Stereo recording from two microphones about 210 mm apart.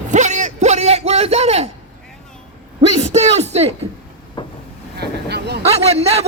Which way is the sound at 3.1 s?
30° right (ahead or behind).